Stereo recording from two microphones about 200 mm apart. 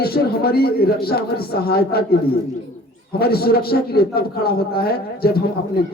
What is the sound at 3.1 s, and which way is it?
A man's voice, 50° left (ahead or behind).